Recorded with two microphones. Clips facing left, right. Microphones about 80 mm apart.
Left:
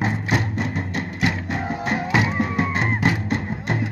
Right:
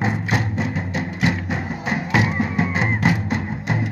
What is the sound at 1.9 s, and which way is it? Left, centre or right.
Music, centre.